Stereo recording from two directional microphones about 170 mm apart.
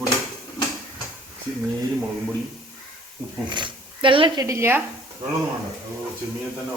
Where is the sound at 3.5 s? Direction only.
30° right (ahead or behind).